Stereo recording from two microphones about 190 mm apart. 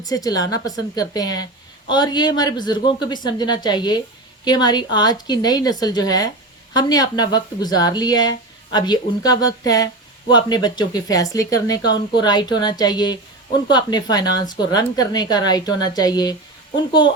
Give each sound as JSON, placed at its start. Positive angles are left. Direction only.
{"t": 0.0, "sound": "speech", "side_deg": 20}